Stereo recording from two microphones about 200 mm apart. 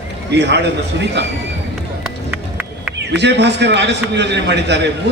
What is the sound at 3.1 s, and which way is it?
A man's voice, 60° right (ahead or behind).